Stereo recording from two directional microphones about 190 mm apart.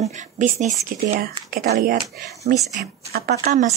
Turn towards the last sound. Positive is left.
turn(degrees=-55)  # may be behind; listen again after turning